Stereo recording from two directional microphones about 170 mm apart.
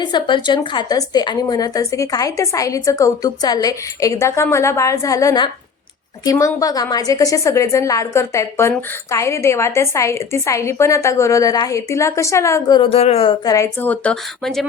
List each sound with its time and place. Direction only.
0.0 s a woman's voice: 25° left (ahead or behind)
13.4 s a woman's voice: 20° left (ahead or behind); by 14.7 s centre (ahead or behind)